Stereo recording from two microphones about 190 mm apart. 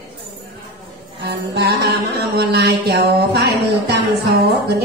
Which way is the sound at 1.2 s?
60° right (ahead or behind).